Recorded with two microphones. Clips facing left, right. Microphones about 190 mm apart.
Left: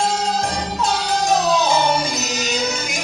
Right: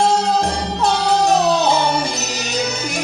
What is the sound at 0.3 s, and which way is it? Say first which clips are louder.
Music: right 3 dB; 65° right (ahead or behind).